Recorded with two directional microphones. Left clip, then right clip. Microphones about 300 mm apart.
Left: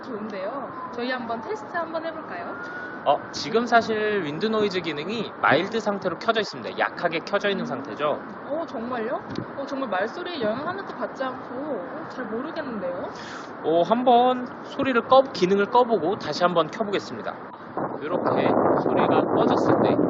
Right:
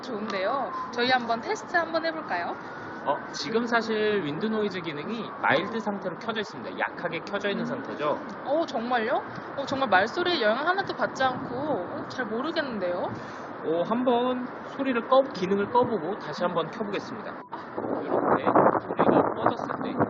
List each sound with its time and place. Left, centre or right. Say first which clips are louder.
0.9 s speech: right 5 dB; centre
3.1 s a man's voice: left 5 dB; centre
8.9 s speech: right 2 dB; centre
12.5 s speech: right 2 dB; centre
13.7 s a man's voice: left 7 dB; centre
18.0 s a man's voice: left 2 dB; centre